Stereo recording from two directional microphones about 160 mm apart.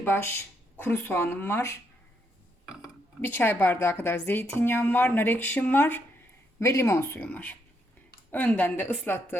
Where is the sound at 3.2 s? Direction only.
15° left (ahead or behind).